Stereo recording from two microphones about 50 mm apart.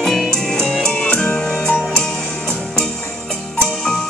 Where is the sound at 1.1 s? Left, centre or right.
Centre.